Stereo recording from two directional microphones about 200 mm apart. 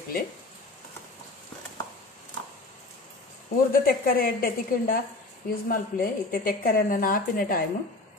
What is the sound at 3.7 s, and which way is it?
A woman's voice, 45° left (ahead or behind).